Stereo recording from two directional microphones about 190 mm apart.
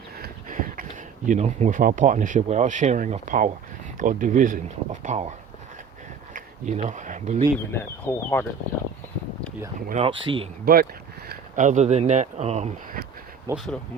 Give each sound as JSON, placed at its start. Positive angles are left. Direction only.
{"t": 0.2, "sound": "speech", "side_deg": -45}
{"t": 6.3, "sound": "speech", "side_deg": -40}
{"t": 7.7, "sound": "speech", "side_deg": 10}
{"t": 9.9, "sound": "speech", "side_deg": -30}
{"t": 11.3, "sound": "speech", "side_deg": -40}
{"t": 13.5, "sound": "speech", "side_deg": -15}